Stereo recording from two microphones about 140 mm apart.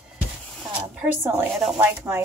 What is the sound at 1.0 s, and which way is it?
A woman's voice, 15° right (ahead or behind).